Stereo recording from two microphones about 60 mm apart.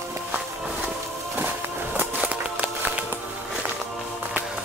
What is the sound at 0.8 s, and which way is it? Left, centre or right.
Music, right.